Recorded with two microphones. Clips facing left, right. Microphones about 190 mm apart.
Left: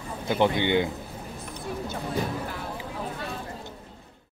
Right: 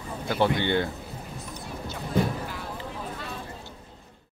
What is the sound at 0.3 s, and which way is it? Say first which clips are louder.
Speech: left 1 dB; 15° left (ahead or behind).